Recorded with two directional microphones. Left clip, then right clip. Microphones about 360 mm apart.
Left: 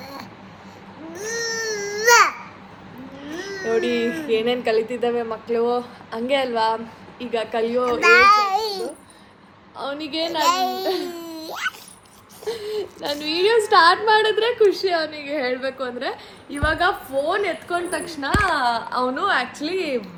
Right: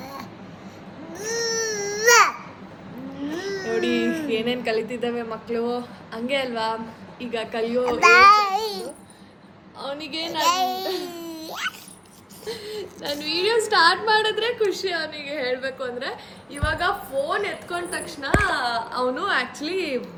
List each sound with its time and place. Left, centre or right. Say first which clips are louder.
0.0 s a sound: even; centre
1.1 s baby cry: even; centre
3.2 s a sound: right 2 dB; right
3.7 s a woman's voice: left 3 dB; centre
8.0 s child singing: right 1 dB; centre
9.9 s a woman's voice: left 3 dB; centre
11.0 s a sound: left 2 dB; centre
12.5 s a woman's voice: left 5 dB; centre
13.5 s a woman's voice: left 4 dB; centre
13.9 s a woman's voice: left 3 dB; centre